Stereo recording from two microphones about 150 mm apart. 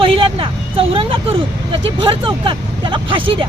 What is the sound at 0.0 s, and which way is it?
Speech, 35° right (ahead or behind).